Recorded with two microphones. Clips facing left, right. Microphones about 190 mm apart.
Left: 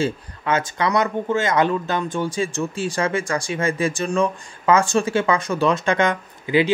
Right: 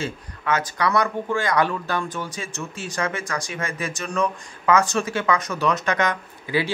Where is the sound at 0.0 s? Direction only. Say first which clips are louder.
Left 6 dB; 25° left (ahead or behind).